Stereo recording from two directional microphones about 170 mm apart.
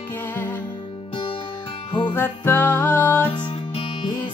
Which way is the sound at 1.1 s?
30° left (ahead or behind).